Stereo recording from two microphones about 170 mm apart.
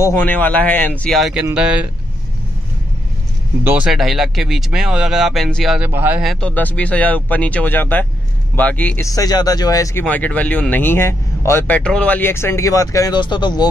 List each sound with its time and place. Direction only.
0.0 s speech: 10° left (ahead or behind); by 1.9 s 5° right (ahead or behind)
3.6 s speech: 5° right (ahead or behind)
5.9 s speech: 10° right (ahead or behind)
6.4 s speech: 10° left (ahead or behind)
10.0 s speech: 10° left (ahead or behind); by 13.7 s 25° left (ahead or behind)